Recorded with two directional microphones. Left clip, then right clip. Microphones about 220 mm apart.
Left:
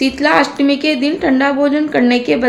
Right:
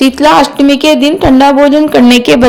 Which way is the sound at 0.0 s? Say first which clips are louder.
Right 7 dB; 30° right (ahead or behind).